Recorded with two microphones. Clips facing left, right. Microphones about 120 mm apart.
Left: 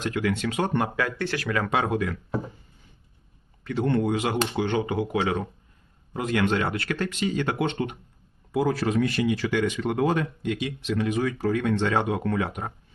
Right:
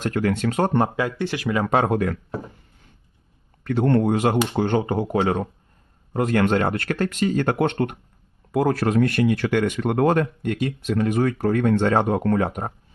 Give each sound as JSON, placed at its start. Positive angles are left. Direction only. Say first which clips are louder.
{"t": 0.0, "sound": "speech", "louder": "right 4 dB", "side_deg": -45}
{"t": 0.9, "sound": "speech", "louder": "right 3 dB", "side_deg": -20}
{"t": 1.7, "sound": "speech", "louder": "right 6 dB", "side_deg": -45}
{"t": 3.6, "sound": "speech", "louder": "right 5 dB", "side_deg": -55}